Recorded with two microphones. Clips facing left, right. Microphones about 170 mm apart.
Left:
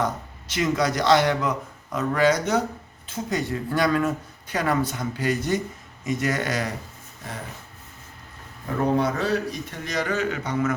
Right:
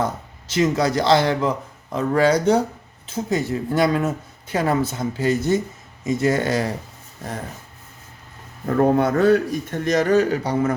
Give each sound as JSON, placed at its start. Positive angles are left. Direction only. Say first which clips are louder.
{"t": 0.5, "sound": "speech", "louder": "right 4 dB", "side_deg": -30}
{"t": 8.6, "sound": "a man's voice", "louder": "right 5 dB", "side_deg": -50}